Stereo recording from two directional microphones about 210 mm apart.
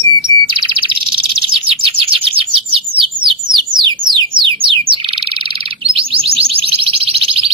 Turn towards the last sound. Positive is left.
turn(degrees=-25)  # may be behind; listen again after turning